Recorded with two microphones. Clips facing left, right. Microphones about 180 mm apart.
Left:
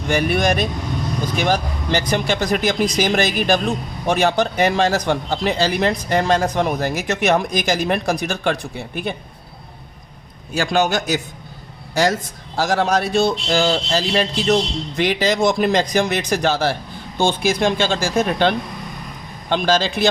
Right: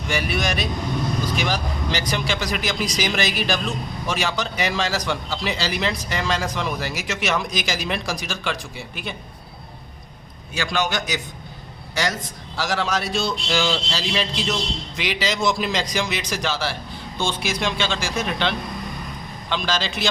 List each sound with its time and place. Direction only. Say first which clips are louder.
0.1 s speech: left 7 dB; 50° left (ahead or behind)
10.5 s speech: left 6 dB; 45° left (ahead or behind)
12.5 s speech: left 6 dB; 50° left (ahead or behind)